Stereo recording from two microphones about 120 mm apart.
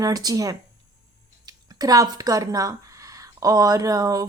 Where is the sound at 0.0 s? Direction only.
30° right (ahead or behind).